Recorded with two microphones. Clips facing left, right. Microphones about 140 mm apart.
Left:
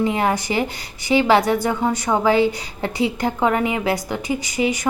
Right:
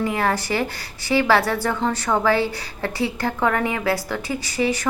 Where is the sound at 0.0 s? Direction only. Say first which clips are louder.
Left 2 dB; 20° left (ahead or behind).